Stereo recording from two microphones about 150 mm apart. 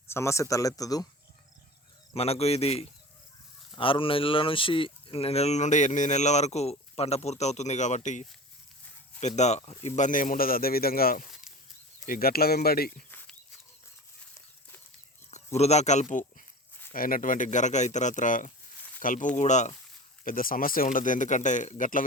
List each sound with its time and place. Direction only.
0.1 s speech: 20° left (ahead or behind)
2.1 s speech: 40° left (ahead or behind); by 13.1 s 90° left
13.1 s a sound: 10° left (ahead or behind)
15.5 s speech: 45° left (ahead or behind)
16.9 s speech: 70° left (ahead or behind)
19.4 s speech: 55° left (ahead or behind)
20.2 s speech: 70° left (ahead or behind)